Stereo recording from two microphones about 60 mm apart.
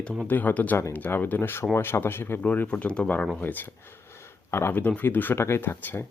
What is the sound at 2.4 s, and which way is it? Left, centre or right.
Speech, left.